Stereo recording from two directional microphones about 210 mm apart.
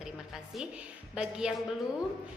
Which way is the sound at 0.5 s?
5° right (ahead or behind).